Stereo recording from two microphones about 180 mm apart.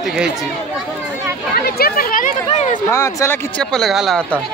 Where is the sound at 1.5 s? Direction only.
55° left (ahead or behind); by 2.8 s 40° left (ahead or behind).